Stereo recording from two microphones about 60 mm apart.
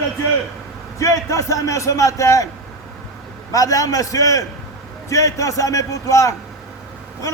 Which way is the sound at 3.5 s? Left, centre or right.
Left.